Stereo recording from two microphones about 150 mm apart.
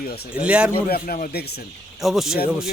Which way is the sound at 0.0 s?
90° left.